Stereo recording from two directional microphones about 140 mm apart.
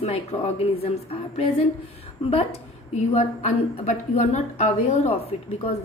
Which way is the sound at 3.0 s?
55° left (ahead or behind).